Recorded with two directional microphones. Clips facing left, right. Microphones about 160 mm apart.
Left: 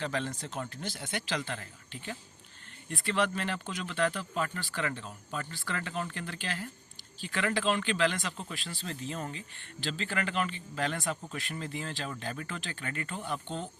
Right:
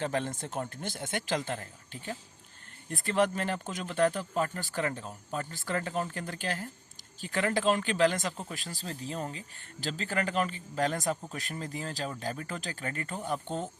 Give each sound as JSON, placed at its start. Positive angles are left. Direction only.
{"t": 0.0, "sound": "speech", "side_deg": -50}